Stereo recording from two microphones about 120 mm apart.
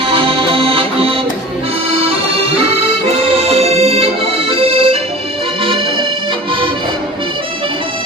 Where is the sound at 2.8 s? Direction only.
55° right (ahead or behind).